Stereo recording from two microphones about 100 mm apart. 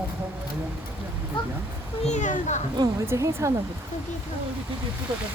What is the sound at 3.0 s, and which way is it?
Speech, 30° right (ahead or behind).